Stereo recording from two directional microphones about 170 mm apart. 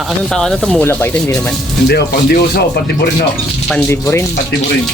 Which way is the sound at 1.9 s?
70° left (ahead or behind).